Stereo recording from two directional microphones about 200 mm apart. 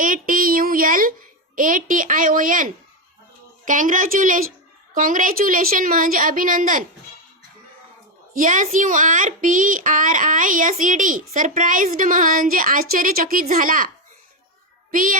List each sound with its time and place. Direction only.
0.0 s a sound: 45° right (ahead or behind)
1.5 s a woman's voice: 40° right (ahead or behind)
3.7 s a woman's voice: 40° right (ahead or behind)
8.3 s a woman's voice: 40° right (ahead or behind)